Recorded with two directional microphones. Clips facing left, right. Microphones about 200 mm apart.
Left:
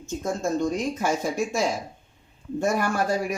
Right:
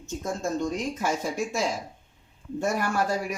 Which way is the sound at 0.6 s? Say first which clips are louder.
Left 3 dB; 50° left (ahead or behind).